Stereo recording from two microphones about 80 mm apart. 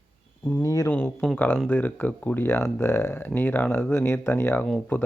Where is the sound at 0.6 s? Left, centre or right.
Left.